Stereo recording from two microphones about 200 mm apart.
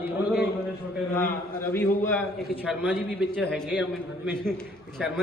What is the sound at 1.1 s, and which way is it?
A man's voice, 10° left (ahead or behind).